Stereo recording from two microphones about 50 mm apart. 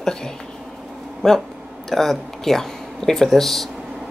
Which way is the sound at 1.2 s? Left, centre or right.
Centre.